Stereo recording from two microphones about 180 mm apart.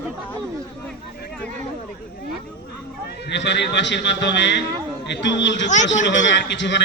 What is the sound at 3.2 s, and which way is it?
A man's voice, 75° left (ahead or behind).